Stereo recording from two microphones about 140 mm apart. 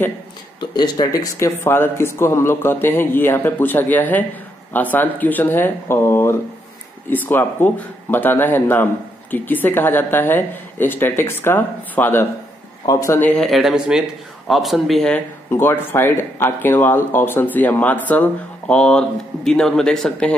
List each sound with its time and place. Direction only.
0.6 s a man's voice: 30° left (ahead or behind); by 15.2 s 5° left (ahead or behind)
15.5 s a man's voice: 15° left (ahead or behind)